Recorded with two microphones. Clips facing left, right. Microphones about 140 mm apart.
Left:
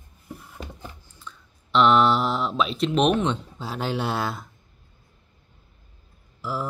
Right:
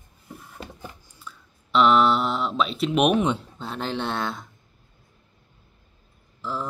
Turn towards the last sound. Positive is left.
turn(degrees=5)  # may be behind; listen again after turning